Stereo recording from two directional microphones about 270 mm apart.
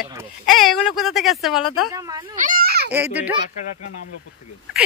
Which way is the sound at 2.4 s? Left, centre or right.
Right.